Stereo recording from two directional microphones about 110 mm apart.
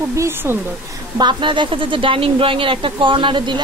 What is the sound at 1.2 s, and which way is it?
Speech, 45° right (ahead or behind).